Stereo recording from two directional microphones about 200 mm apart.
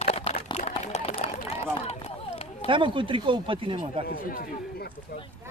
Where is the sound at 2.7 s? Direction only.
25° right (ahead or behind).